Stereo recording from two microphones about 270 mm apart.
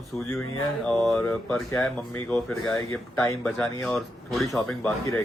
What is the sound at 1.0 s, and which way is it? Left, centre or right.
Speech, centre.